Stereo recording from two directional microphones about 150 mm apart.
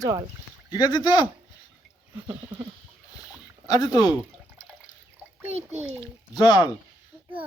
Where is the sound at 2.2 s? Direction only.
30° right (ahead or behind).